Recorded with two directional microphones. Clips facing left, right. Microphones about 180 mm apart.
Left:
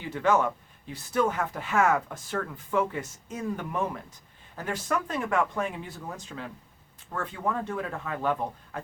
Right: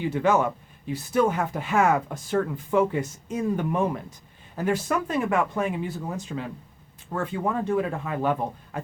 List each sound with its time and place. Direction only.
0.0 s speech: 15° right (ahead or behind)